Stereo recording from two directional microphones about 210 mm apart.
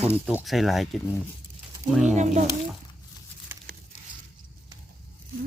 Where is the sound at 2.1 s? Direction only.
35° right (ahead or behind).